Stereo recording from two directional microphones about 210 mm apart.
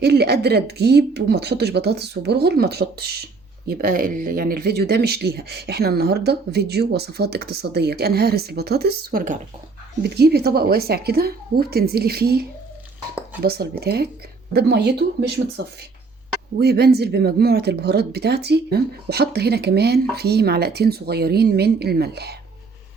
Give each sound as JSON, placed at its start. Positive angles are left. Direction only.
{"t": 0.0, "sound": "speech", "side_deg": -50}
{"t": 16.6, "sound": "speech", "side_deg": -50}